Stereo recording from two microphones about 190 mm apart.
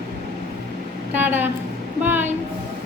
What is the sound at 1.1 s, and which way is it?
A woman's voice, 10° right (ahead or behind).